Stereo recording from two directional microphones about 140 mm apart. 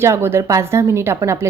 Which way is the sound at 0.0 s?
20° right (ahead or behind).